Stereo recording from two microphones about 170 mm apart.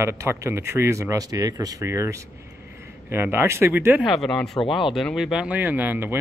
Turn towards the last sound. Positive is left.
turn(degrees=-10)  # may be behind; listen again after turning